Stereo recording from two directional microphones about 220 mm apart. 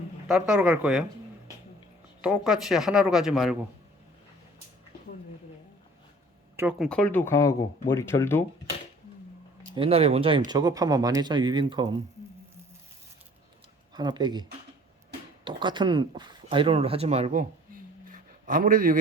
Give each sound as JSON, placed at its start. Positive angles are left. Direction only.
{"t": 0.3, "sound": "speech", "side_deg": -5}
{"t": 2.2, "sound": "speech", "side_deg": -5}
{"t": 6.6, "sound": "speech", "side_deg": -5}
{"t": 9.7, "sound": "speech", "side_deg": -25}
{"t": 13.9, "sound": "speech", "side_deg": -20}
{"t": 15.4, "sound": "speech", "side_deg": -20}
{"t": 18.1, "sound": "a sound", "side_deg": -35}